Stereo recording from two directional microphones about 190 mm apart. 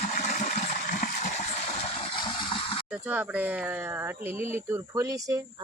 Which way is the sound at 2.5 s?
25° left (ahead or behind).